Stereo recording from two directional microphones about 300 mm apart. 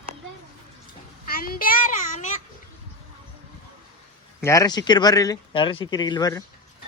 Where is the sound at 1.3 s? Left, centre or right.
Left.